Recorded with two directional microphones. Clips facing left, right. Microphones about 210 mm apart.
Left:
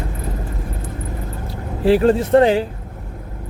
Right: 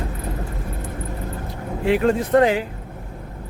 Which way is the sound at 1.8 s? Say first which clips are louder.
Left 5 dB; 35° left (ahead or behind).